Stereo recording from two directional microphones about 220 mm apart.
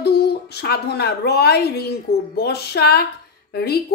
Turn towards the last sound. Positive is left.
turn(degrees=45)  # may be behind; listen again after turning